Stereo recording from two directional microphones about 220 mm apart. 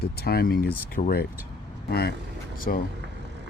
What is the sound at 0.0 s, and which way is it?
Speech, 45° left (ahead or behind).